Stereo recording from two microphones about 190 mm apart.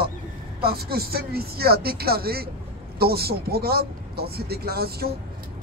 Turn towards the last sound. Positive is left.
turn(degrees=-55)  # may be behind; listen again after turning